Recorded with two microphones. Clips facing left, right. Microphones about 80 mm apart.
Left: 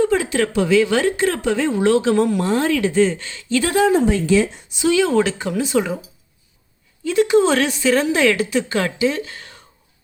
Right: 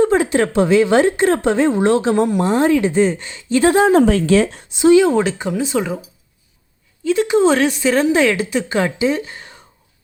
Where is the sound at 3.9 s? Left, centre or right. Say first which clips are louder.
Right 4 dB; right.